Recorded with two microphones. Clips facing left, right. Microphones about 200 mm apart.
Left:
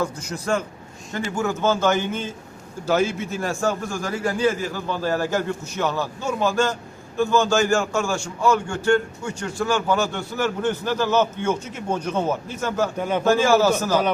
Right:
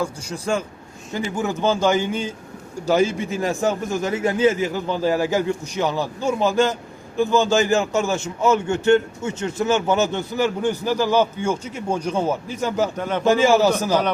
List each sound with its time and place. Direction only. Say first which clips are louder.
0.0 s a man's voice: even; 10° right (ahead or behind)
13.0 s a man's voice: left 1 dB; 10° left (ahead or behind)
13.2 s a man's voice: right 2 dB; 15° right (ahead or behind)